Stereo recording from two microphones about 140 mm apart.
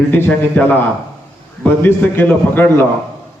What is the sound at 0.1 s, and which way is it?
A man's voice, 10° left (ahead or behind).